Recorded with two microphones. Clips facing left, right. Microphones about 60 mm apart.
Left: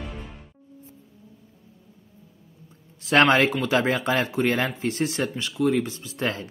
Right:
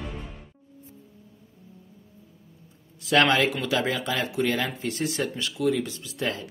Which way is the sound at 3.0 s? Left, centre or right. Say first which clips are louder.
Left 3 dB; left.